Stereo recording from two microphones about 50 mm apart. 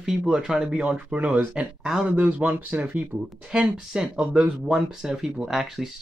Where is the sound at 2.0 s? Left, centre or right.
Right.